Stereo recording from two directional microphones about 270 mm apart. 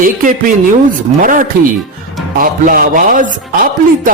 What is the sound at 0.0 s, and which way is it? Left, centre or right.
A man's voice, right.